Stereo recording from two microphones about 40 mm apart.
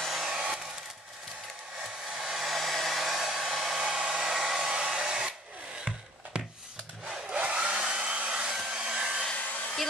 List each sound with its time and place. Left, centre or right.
0.0 s hair dryer: centre
1.8 s hair dryer: centre
3.7 s hair dryer: centre
7.2 s hair dryer: right
9.3 s hair dryer: left